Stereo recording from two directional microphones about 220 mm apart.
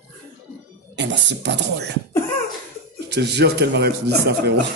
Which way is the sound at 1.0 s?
50° right (ahead or behind).